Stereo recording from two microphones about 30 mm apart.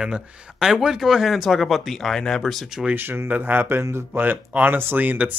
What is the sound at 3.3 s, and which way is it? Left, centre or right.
Speech, right.